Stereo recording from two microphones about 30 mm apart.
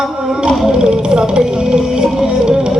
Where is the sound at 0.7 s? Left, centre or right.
Right.